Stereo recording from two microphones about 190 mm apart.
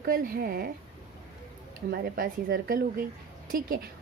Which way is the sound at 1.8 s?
50° right (ahead or behind).